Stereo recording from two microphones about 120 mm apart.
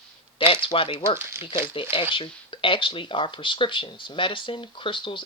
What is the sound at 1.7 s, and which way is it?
Speech, 45° left (ahead or behind).